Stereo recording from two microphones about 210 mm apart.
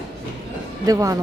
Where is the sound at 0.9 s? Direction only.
15° right (ahead or behind).